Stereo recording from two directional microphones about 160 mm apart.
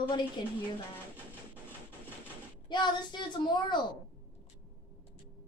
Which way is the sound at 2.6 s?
25° left (ahead or behind).